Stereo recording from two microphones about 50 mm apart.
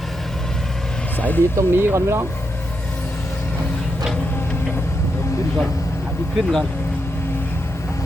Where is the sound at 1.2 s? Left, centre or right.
Left.